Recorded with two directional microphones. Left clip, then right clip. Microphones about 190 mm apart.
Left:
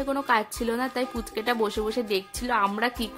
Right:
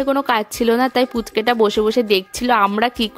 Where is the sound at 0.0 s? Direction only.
40° right (ahead or behind).